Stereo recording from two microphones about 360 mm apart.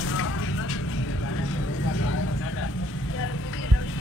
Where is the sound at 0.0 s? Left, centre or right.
Left.